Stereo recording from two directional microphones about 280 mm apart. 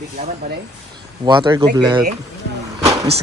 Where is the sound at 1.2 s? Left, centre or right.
Centre.